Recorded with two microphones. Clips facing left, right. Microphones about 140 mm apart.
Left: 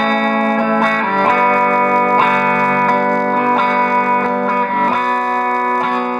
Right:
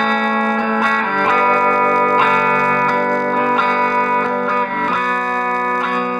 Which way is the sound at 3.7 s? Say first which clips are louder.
Left 2 dB; 50° left (ahead or behind).